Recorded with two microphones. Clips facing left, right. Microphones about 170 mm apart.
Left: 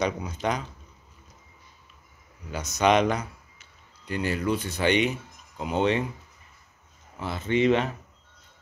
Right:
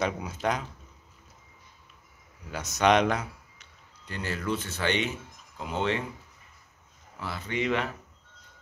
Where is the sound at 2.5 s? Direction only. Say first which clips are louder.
Left 1 dB; centre (ahead or behind).